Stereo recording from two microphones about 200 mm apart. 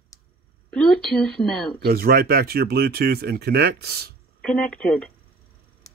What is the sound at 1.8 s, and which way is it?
Speech, 50° right (ahead or behind).